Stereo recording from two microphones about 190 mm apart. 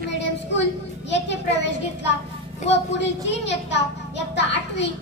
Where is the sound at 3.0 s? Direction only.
65° left (ahead or behind).